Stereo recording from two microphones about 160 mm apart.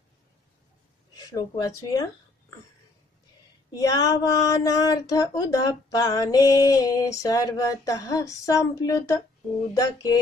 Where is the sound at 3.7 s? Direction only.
20° left (ahead or behind).